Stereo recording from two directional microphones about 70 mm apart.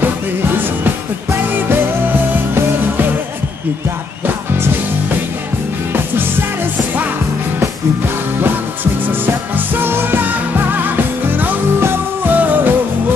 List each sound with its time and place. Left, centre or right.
2.5 s music: right
9.8 s music: right